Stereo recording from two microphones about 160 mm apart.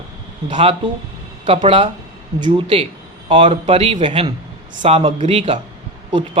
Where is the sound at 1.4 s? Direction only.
35° right (ahead or behind).